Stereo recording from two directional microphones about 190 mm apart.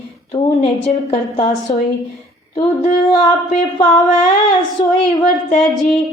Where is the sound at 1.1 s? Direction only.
35° left (ahead or behind).